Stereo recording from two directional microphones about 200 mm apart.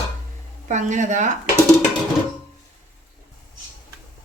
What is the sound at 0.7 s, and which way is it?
Speech, 35° right (ahead or behind).